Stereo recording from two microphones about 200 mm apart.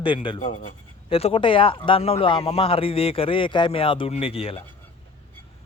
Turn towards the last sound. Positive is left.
turn(degrees=30)  # may be behind; listen again after turning